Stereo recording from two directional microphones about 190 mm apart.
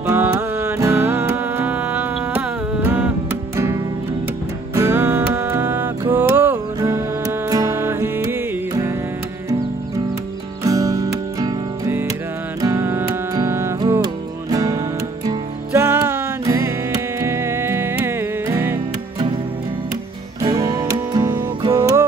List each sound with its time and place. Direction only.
0.0 s music: 15° right (ahead or behind)
4.7 s music: 15° right (ahead or behind)
10.6 s music: 15° right (ahead or behind)
20.4 s music: 20° right (ahead or behind)